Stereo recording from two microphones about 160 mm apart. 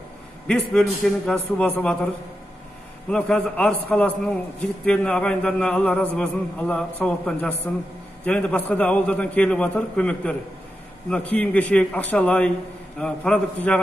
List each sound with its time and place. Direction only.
1.0 s a man's voice: 5° left (ahead or behind)
3.1 s a man's voice: 5° left (ahead or behind)